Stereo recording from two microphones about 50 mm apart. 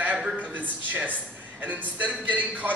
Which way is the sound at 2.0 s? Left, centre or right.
Right.